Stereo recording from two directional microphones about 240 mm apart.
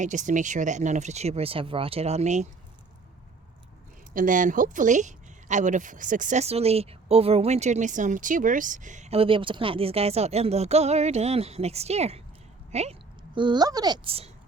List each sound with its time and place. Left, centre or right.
0.0 s speech: right
4.1 s a woman's voice: right